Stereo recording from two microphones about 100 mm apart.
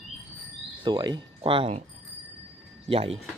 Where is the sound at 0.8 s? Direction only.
45° right (ahead or behind); by 1.8 s 60° right (ahead or behind).